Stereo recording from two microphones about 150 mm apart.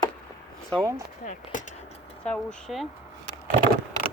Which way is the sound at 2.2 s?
5° left (ahead or behind).